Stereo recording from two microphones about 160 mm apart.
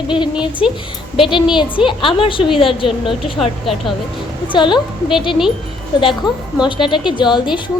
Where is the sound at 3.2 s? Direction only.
Centre (ahead or behind).